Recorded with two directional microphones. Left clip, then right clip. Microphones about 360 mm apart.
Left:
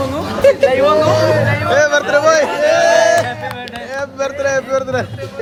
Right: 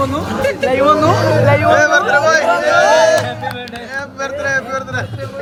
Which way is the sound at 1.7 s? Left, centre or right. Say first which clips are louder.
Even; centre.